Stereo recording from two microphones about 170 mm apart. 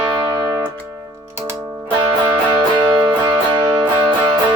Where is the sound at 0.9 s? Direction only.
15° right (ahead or behind).